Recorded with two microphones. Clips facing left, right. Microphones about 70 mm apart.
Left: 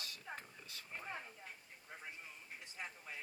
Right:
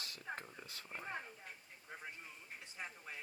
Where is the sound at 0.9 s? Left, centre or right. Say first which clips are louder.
Right 2 dB; centre.